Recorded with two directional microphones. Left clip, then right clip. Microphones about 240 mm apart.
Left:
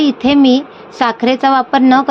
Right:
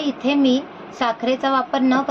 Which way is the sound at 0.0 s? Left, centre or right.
Left.